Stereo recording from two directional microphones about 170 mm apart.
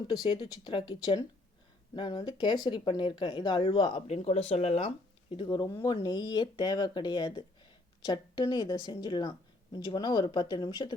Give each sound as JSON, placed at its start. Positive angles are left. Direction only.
{"t": 0.1, "sound": "speech", "side_deg": 25}
{"t": 5.5, "sound": "speech", "side_deg": 25}